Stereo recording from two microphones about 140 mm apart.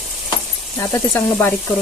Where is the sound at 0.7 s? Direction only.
15° left (ahead or behind).